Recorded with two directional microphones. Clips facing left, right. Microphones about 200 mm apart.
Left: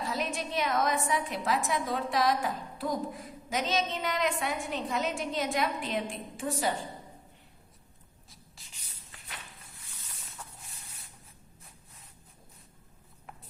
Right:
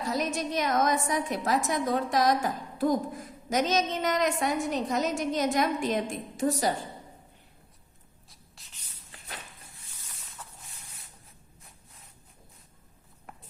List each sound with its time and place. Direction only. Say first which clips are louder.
0.1 s a woman's voice: right 6 dB; 40° right (ahead or behind)
8.3 s writing: left 2 dB; centre (ahead or behind)